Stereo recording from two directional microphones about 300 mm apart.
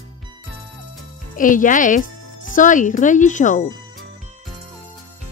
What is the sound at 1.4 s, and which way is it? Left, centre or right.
Speech, left.